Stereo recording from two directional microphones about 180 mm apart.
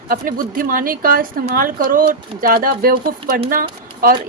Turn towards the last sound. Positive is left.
turn(degrees=-55)  # may be behind; listen again after turning